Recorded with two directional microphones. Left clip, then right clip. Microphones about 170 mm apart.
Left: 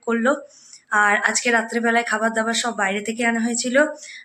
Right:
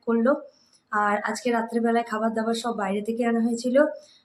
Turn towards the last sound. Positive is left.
turn(degrees=-5)  # may be behind; listen again after turning